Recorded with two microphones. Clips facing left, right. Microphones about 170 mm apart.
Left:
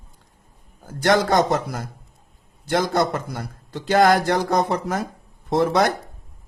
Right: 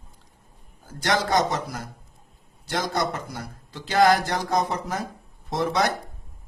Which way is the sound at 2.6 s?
55° left (ahead or behind).